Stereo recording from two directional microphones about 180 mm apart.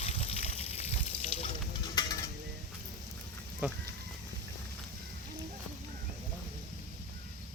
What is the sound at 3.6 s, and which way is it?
Speech, 10° right (ahead or behind).